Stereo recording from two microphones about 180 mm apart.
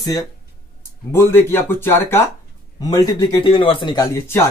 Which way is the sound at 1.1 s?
10° left (ahead or behind).